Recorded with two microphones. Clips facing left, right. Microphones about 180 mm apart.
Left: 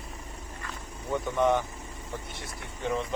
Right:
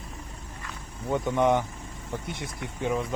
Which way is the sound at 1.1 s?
15° right (ahead or behind).